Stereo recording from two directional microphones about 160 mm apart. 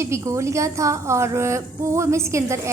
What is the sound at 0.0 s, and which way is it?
A woman's voice, 20° right (ahead or behind).